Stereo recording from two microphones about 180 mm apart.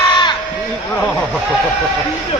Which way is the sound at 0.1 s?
25° left (ahead or behind).